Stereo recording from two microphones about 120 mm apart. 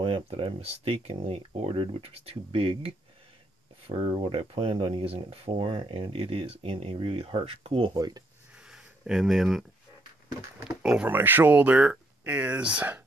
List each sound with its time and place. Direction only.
0.0 s speech: 50° right (ahead or behind)
8.6 s a sound: 5° right (ahead or behind)
10.8 s speech: 10° right (ahead or behind)